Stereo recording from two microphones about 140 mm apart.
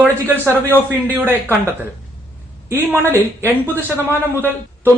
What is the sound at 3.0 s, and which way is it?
Speech, 15° left (ahead or behind).